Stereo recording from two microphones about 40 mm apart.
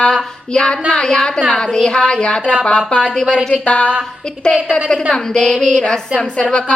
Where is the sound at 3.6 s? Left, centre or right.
Left.